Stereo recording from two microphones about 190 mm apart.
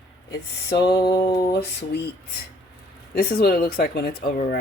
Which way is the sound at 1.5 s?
60° left (ahead or behind).